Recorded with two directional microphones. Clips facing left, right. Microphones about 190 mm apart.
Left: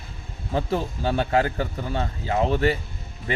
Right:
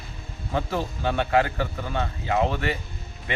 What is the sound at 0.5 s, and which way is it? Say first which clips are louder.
A man's voice: left 2 dB; 35° left (ahead or behind).